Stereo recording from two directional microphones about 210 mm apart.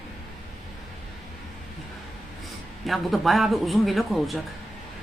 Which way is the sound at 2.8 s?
Centre (ahead or behind).